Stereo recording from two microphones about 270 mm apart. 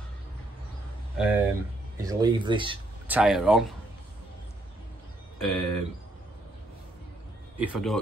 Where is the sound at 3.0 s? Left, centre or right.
Centre.